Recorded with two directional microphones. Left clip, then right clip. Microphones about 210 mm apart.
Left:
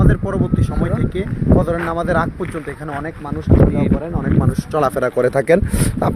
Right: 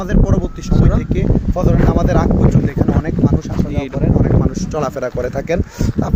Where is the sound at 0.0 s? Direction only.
10° right (ahead or behind).